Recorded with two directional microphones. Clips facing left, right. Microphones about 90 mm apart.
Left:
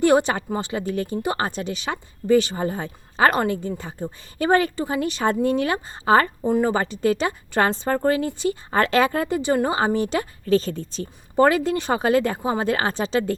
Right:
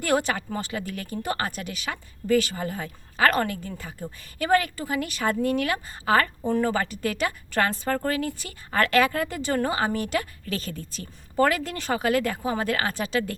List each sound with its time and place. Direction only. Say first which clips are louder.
0.0 s speech: left 7 dB; 20° left (ahead or behind)